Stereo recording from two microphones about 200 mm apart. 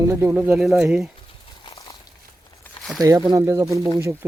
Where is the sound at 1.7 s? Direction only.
15° left (ahead or behind).